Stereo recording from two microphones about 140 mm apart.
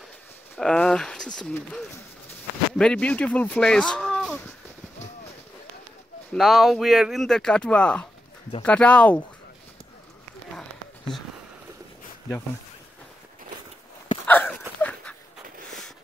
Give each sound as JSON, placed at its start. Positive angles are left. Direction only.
{"t": 0.6, "sound": "speech", "side_deg": 5}
{"t": 2.8, "sound": "speech", "side_deg": 10}
{"t": 6.3, "sound": "speech", "side_deg": 0}
{"t": 10.5, "sound": "a sound", "side_deg": 5}
{"t": 14.2, "sound": "a sound", "side_deg": 10}
{"t": 14.8, "sound": "dog", "side_deg": 10}